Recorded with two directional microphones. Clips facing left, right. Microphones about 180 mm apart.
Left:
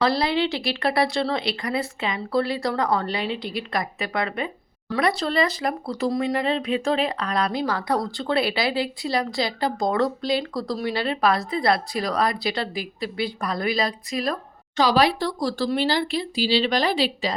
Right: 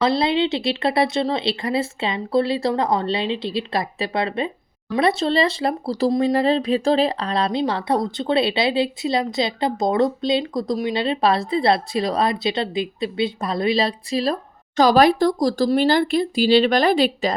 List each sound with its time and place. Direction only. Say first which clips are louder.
0.0 s speech: right 3 dB; 20° right (ahead or behind)
14.8 s speech: right 5 dB; 45° right (ahead or behind)